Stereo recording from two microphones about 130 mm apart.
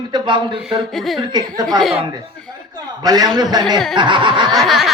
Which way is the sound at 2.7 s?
30° right (ahead or behind).